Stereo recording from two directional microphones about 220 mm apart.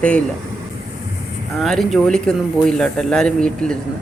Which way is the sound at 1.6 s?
Centre (ahead or behind).